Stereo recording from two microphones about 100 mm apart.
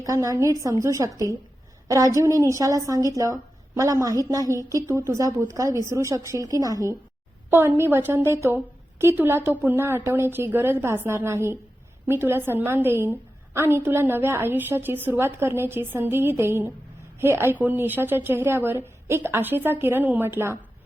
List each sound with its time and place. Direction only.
0.1 s a woman's voice: 30° right (ahead or behind)
7.5 s a woman's voice: 25° right (ahead or behind)